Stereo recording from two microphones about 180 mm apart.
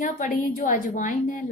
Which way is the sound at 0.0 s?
45° left (ahead or behind).